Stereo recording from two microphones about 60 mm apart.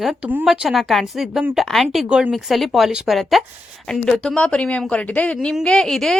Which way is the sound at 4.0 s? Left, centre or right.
Centre.